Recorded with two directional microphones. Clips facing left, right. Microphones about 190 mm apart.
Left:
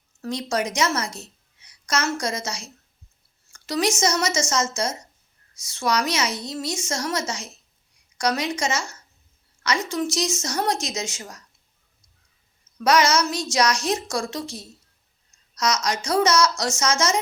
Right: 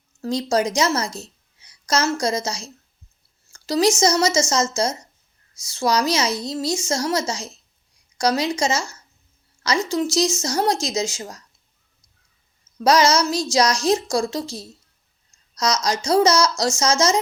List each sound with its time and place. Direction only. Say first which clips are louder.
0.2 s a woman's voice: right 5 dB; 35° right (ahead or behind)
9.9 s a woman's voice: right 4 dB; 30° right (ahead or behind)
12.8 s a woman's voice: right 3 dB; 30° right (ahead or behind)